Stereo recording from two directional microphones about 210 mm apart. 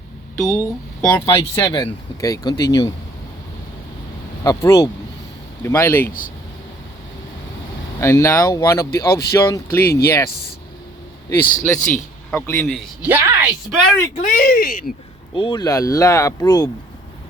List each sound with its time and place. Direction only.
0.3 s speech: 15° left (ahead or behind)
4.4 s speech: 15° left (ahead or behind)
8.0 s speech: 15° left (ahead or behind)
11.6 s speech: 5° left (ahead or behind)
13.1 s a woman's voice: 10° right (ahead or behind)
14.2 s speech: 40° left (ahead or behind)
15.4 s speech: 20° left (ahead or behind)